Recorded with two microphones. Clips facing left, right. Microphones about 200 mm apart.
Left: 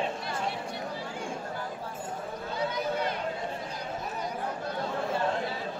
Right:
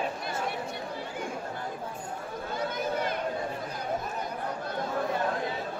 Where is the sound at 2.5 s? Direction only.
50° right (ahead or behind).